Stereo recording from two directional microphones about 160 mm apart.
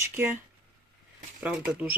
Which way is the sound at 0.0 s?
15° right (ahead or behind).